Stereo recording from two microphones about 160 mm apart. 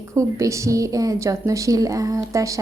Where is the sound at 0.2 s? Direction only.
20° right (ahead or behind).